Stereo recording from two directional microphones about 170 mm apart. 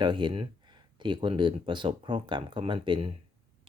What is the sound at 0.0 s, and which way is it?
Speech, 25° right (ahead or behind).